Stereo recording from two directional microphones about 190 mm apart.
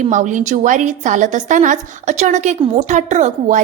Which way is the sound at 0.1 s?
40° right (ahead or behind).